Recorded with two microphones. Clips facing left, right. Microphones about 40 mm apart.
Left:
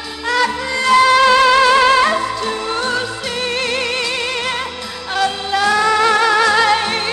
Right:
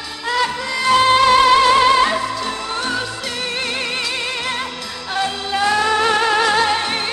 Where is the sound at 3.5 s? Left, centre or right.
Centre.